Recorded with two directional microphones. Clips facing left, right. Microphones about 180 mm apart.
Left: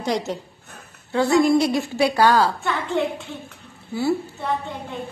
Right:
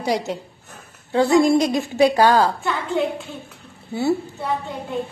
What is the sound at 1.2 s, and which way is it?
A woman's voice, 25° right (ahead or behind).